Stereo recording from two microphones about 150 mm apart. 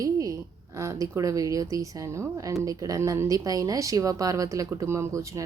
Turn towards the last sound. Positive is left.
turn(degrees=-20)  # may be behind; listen again after turning